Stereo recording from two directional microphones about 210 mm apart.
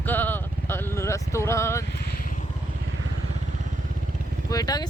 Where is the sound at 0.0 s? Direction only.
10° left (ahead or behind).